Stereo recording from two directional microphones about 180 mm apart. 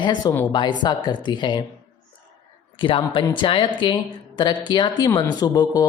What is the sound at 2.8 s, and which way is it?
Speech, 25° left (ahead or behind).